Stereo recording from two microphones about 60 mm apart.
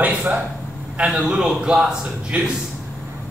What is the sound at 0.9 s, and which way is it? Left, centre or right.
A man's voice, centre.